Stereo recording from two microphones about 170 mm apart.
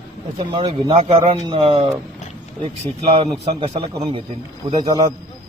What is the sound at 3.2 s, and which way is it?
A man's voice, 35° right (ahead or behind).